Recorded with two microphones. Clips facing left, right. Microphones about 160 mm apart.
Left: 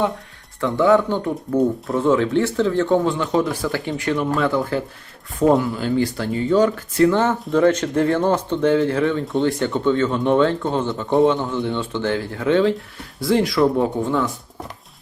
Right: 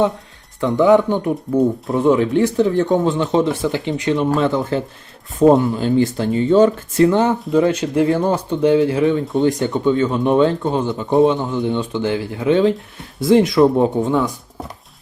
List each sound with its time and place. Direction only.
0.6 s speech: 15° right (ahead or behind)